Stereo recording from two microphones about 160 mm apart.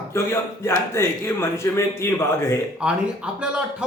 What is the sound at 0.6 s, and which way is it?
A man's voice, 15° left (ahead or behind).